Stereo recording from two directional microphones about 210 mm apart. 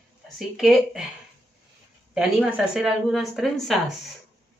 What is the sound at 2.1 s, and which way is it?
Speech, centre (ahead or behind).